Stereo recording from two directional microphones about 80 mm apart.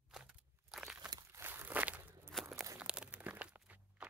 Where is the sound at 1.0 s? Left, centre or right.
Right.